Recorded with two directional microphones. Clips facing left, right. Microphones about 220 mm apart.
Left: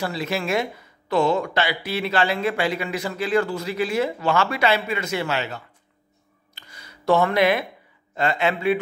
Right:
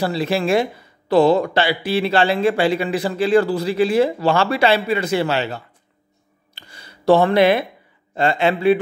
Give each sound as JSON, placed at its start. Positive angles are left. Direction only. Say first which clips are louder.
{"t": 0.0, "sound": "speech", "louder": "right 6 dB", "side_deg": -30}
{"t": 6.5, "sound": "a sound", "louder": "right 3 dB", "side_deg": -30}
{"t": 8.1, "sound": "speech", "louder": "right 4 dB", "side_deg": -30}